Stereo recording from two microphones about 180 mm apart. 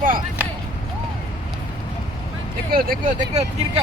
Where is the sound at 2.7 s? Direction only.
55° right (ahead or behind).